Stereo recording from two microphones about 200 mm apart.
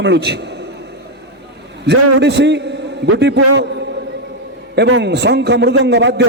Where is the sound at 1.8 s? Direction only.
60° right (ahead or behind).